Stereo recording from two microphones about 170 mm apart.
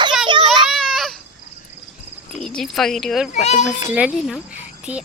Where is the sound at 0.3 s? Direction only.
30° right (ahead or behind).